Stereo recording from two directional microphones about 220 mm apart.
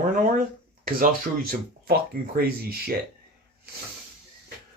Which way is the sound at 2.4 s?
45° right (ahead or behind).